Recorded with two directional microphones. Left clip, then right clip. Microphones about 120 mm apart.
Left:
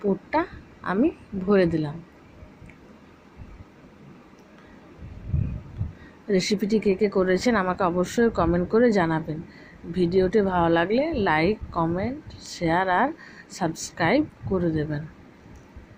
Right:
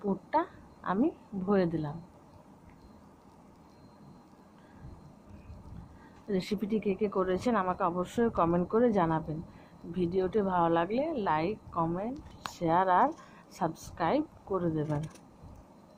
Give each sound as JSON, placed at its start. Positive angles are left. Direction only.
{"t": 0.0, "sound": "a sound", "side_deg": 25}
{"t": 0.9, "sound": "speech", "side_deg": 25}
{"t": 6.2, "sound": "speech", "side_deg": 35}
{"t": 12.5, "sound": "speech", "side_deg": 25}
{"t": 14.5, "sound": "speech", "side_deg": 20}